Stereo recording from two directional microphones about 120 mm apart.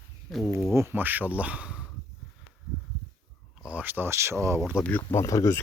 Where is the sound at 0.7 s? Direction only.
20° right (ahead or behind).